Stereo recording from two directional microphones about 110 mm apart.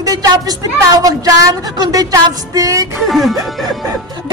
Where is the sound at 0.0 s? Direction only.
35° right (ahead or behind).